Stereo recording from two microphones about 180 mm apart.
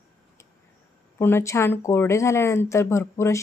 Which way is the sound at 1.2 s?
15° left (ahead or behind).